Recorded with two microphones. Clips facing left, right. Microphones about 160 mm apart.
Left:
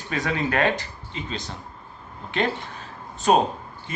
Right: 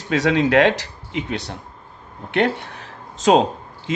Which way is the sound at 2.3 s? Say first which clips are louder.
Right 6 dB; 70° right (ahead or behind).